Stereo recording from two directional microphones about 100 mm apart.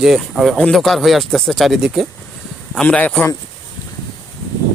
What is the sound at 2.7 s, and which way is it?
Speech, 10° left (ahead or behind).